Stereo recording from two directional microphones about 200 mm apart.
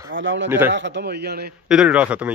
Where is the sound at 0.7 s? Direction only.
60° right (ahead or behind).